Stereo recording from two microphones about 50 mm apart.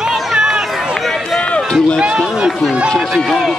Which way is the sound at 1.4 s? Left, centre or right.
Left.